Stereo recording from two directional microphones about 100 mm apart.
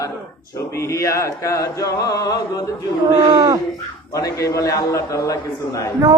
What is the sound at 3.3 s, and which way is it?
Speech, 40° right (ahead or behind).